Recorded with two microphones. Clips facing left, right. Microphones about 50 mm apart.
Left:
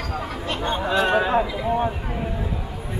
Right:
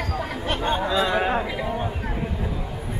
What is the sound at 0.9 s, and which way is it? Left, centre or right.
Speech, left.